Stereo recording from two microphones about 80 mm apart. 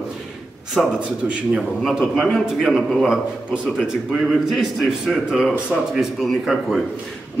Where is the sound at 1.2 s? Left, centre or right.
Right.